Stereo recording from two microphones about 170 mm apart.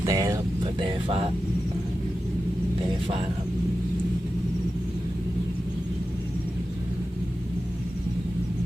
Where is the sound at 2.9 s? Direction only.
30° right (ahead or behind).